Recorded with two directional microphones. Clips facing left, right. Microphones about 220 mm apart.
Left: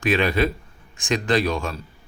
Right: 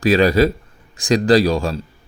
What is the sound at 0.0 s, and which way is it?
Speech, 35° right (ahead or behind).